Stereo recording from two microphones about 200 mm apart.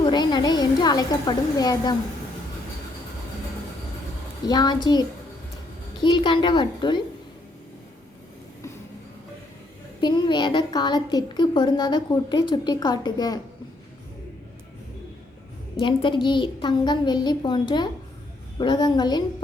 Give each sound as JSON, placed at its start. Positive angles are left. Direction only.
{"t": 0.0, "sound": "a woman's voice", "side_deg": 20}
{"t": 4.4, "sound": "a woman's voice", "side_deg": 20}
{"t": 10.0, "sound": "a woman's voice", "side_deg": 20}
{"t": 15.8, "sound": "a woman's voice", "side_deg": 25}